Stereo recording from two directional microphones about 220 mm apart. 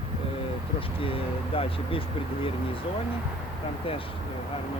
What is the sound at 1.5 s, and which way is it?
Speech, 25° left (ahead or behind).